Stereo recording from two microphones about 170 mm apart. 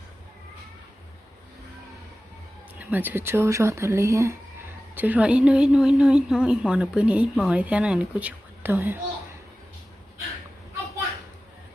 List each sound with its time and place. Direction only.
2.7 s a woman's voice: 10° right (ahead or behind)